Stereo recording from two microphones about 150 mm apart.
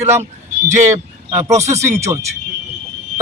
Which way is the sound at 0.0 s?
15° right (ahead or behind).